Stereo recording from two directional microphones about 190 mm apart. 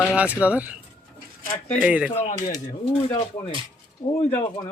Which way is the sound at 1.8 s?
5° right (ahead or behind).